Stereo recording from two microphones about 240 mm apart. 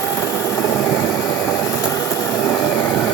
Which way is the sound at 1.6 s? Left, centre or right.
Centre.